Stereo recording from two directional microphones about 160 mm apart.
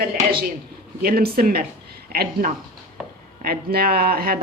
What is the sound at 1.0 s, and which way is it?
Speech, 65° right (ahead or behind).